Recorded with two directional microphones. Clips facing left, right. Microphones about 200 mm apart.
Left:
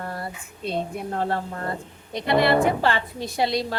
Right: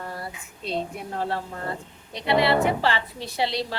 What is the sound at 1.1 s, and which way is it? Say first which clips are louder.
A woman's voice: left 2 dB; 50° left (ahead or behind).